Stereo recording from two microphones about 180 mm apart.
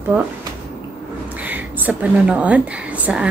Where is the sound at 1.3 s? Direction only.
10° right (ahead or behind).